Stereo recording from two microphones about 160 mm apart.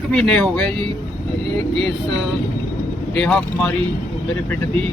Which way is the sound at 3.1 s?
5° left (ahead or behind).